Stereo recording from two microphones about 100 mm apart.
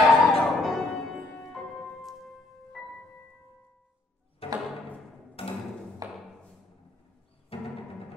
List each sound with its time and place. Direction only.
0.0 s music: centre (ahead or behind)
4.4 s music: 75° left (ahead or behind)
6.0 s tap: 35° right (ahead or behind)
7.5 s music: 75° left (ahead or behind)